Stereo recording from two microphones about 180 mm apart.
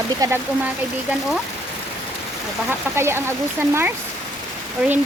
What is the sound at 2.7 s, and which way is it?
Child singing, 15° right (ahead or behind).